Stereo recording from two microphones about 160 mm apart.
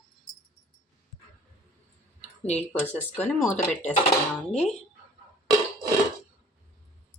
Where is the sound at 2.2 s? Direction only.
45° left (ahead or behind).